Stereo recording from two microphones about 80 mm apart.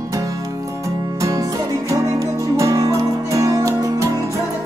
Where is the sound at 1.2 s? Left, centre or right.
Right.